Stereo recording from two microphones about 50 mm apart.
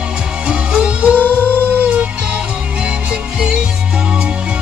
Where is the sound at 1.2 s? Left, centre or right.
Left.